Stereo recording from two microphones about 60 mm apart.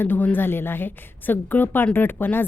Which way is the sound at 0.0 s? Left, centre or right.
Left.